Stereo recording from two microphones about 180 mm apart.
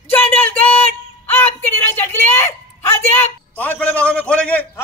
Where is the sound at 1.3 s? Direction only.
10° left (ahead or behind).